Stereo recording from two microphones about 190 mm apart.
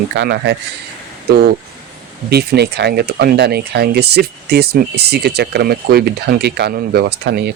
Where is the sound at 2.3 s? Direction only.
60° right (ahead or behind).